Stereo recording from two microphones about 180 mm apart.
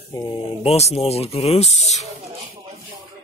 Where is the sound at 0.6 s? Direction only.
35° left (ahead or behind).